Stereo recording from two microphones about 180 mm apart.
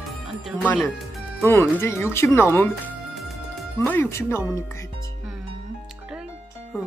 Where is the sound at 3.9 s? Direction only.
15° left (ahead or behind).